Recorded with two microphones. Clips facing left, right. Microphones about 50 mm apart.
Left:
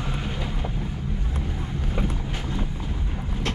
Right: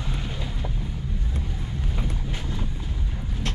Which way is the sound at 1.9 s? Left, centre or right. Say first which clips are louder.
Left 6 dB; left.